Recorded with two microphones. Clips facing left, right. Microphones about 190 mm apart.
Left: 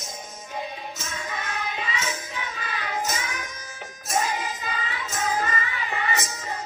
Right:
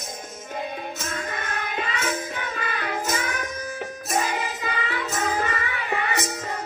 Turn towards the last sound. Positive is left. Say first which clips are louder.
# right 2 dB
turn(degrees=-60)  # may be behind; listen again after turning